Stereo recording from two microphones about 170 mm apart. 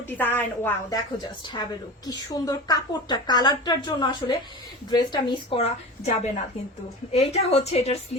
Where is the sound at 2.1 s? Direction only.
20° left (ahead or behind).